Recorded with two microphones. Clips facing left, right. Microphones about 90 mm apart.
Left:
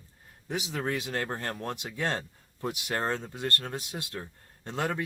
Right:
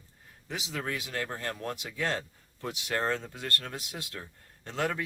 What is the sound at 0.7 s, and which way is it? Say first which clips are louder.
Speech: left 3 dB; 30° left (ahead or behind).